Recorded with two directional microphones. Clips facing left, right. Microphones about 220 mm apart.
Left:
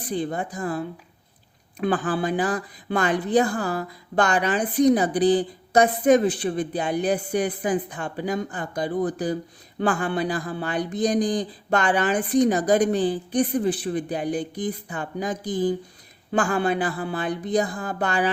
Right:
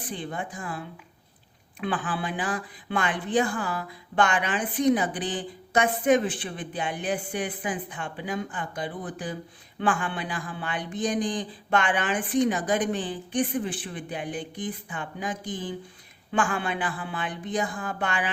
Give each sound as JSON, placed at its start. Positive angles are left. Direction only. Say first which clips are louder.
{"t": 0.0, "sound": "speech", "louder": "left 7 dB", "side_deg": 40}